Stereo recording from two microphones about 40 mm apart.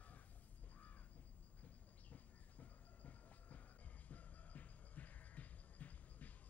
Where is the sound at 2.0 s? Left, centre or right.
Left.